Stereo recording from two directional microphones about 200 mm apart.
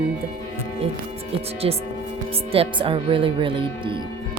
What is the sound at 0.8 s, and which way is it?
Speech, 30° right (ahead or behind).